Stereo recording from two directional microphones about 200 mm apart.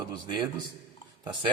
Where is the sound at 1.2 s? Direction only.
25° right (ahead or behind).